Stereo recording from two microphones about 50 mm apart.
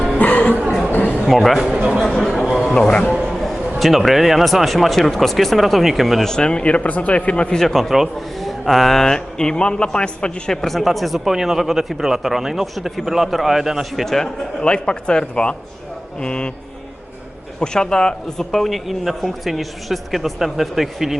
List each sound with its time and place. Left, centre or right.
0.2 s a sound: left
1.3 s a man's voice: centre
2.0 s a sound: centre
2.7 s music: centre
3.2 s a sound: centre
3.8 s a man's voice: centre
6.2 s speech: centre
7.6 s a man's voice: centre
14.0 s a man's voice: centre
14.6 s speech: centre
17.6 s a man's voice: centre